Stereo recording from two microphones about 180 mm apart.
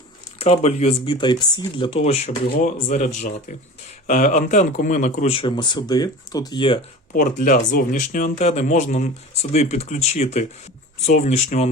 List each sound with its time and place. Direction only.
0.3 s speech: 35° left (ahead or behind)
7.1 s speech: 50° left (ahead or behind)